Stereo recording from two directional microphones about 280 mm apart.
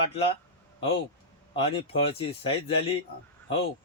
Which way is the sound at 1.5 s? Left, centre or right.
Centre.